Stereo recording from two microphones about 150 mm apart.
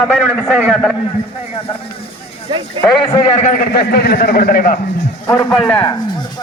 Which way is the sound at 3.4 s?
75° left (ahead or behind).